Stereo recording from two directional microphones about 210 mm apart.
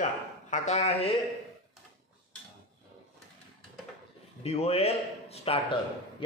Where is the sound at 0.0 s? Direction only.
35° left (ahead or behind).